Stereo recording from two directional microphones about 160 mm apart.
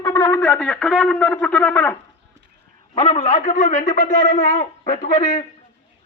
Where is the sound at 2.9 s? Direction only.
35° left (ahead or behind).